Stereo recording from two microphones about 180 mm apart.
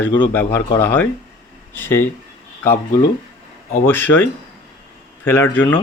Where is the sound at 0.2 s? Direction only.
10° left (ahead or behind).